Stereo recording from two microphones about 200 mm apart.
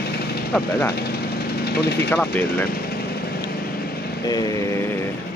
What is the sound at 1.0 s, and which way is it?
Engine, 50° left (ahead or behind).